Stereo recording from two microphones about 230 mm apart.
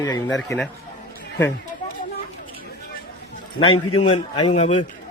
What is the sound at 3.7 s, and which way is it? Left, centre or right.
Speech, left.